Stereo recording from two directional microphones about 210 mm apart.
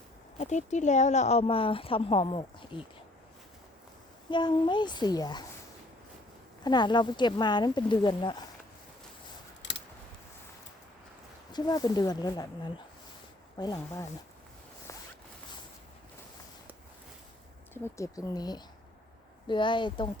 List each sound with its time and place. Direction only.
0.3 s speech: 35° left (ahead or behind)
4.3 s speech: 20° left (ahead or behind)
6.7 s speech: 20° left (ahead or behind)
9.6 s scissors: 60° left (ahead or behind)
11.5 s speech: 20° left (ahead or behind)
17.8 s speech: 15° left (ahead or behind)